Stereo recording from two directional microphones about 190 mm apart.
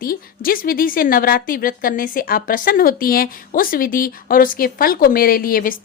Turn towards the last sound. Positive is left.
turn(degrees=45)  # may be behind; listen again after turning